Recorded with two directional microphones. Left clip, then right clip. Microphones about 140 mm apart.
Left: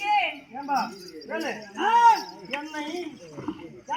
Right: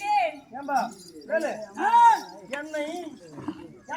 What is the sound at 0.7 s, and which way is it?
Speech, 15° right (ahead or behind).